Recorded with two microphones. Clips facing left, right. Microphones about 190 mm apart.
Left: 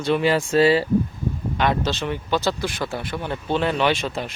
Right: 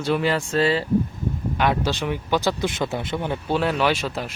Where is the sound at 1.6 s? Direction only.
10° right (ahead or behind).